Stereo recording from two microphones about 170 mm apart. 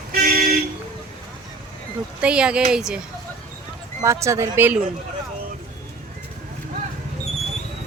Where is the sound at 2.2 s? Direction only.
5° right (ahead or behind).